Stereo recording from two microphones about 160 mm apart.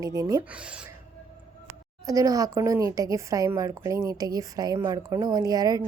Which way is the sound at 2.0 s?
20° right (ahead or behind).